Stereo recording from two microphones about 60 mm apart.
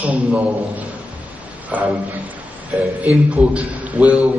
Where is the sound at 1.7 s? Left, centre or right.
Right.